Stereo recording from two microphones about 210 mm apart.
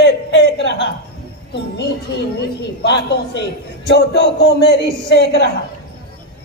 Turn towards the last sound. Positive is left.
turn(degrees=50)  # may be behind; listen again after turning